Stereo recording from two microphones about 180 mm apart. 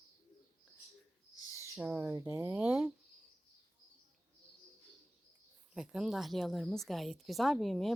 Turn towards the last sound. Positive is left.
turn(degrees=0)  # may be behind; listen again after turning